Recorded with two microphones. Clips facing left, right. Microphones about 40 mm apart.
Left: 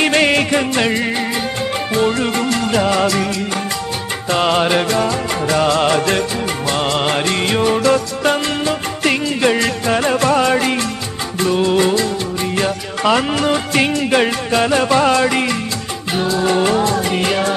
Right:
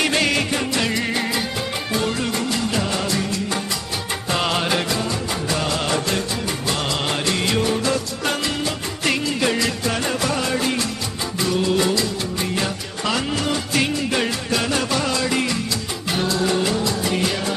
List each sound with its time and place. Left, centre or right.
0.1 s music: left
0.8 s music: left
2.2 s music: left
4.3 s music: centre
4.8 s music: left
6.7 s music: left
10.1 s music: left
11.5 s music: left
16.1 s music: centre
16.4 s music: left
16.7 s music: left
17.1 s music: left